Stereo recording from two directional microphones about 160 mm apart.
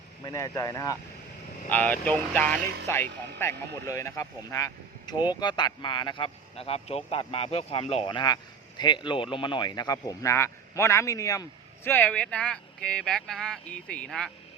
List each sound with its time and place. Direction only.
0.3 s speech: 20° left (ahead or behind)
1.7 s speech: 10° left (ahead or behind)
5.1 s speech: 10° right (ahead or behind)
5.4 s speech: 25° left (ahead or behind)
8.0 s speech: 25° left (ahead or behind); by 14.3 s 5° left (ahead or behind)